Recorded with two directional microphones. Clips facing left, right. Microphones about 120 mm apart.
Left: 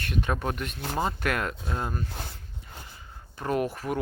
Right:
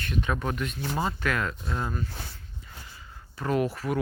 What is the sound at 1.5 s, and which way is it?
Speech, 40° left (ahead or behind).